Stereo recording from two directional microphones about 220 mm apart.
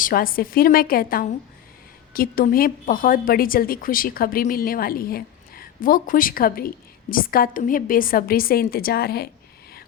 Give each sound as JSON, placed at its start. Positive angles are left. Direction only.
{"t": 0.0, "sound": "a woman's voice", "side_deg": 40}